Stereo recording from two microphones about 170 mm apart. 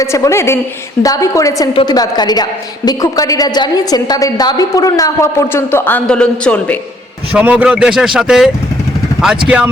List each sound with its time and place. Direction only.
0.0 s a woman's voice: 15° left (ahead or behind)
7.3 s speech: 10° right (ahead or behind)